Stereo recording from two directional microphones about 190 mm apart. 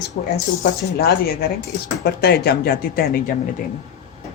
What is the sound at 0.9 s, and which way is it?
Speech, 55° left (ahead or behind).